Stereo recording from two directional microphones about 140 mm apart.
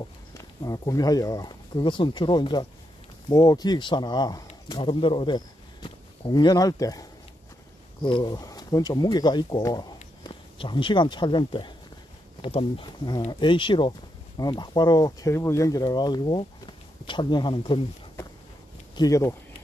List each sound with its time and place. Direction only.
0.4 s speech: 25° left (ahead or behind)
18.9 s speech: 25° left (ahead or behind)